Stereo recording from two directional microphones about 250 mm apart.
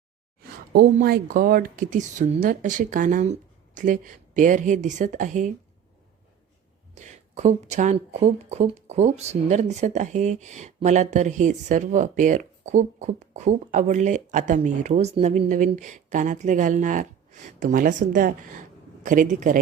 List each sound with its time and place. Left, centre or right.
0.7 s speech: right
6.9 s speech: right